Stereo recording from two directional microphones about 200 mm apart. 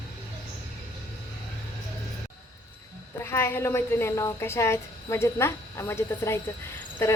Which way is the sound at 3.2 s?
10° left (ahead or behind).